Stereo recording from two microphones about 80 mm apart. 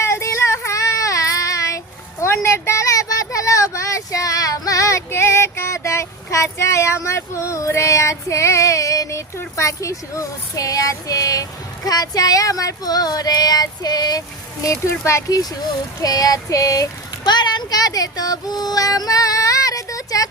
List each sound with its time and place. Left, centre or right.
0.0 s child singing: left
9.6 s female singing: left
15.3 s female singing: left
17.2 s female singing: left